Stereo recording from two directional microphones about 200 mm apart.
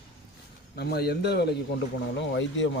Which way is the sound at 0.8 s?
55° left (ahead or behind).